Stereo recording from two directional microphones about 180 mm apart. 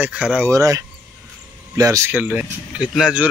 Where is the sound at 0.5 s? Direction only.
15° right (ahead or behind).